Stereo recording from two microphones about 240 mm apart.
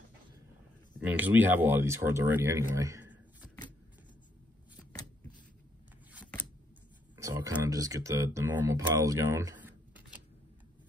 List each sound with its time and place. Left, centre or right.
0.9 s speech: centre
7.2 s a sound: centre
7.6 s speech: centre